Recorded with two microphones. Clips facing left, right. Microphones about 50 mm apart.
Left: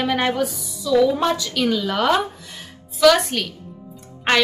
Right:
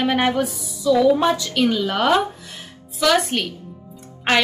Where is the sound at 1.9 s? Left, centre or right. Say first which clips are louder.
Right 1 dB; centre.